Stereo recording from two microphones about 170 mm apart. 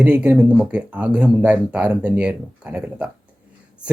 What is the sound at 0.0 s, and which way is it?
Speech, 10° right (ahead or behind).